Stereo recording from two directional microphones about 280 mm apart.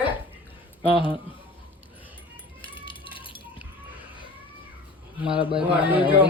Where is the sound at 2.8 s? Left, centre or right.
Centre.